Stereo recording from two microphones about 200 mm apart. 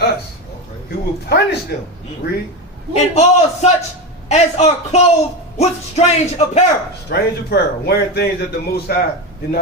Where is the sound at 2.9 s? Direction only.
35° left (ahead or behind).